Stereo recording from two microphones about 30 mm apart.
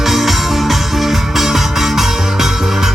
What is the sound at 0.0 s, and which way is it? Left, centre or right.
Music, centre.